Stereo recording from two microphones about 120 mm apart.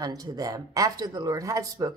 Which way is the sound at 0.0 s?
30° right (ahead or behind).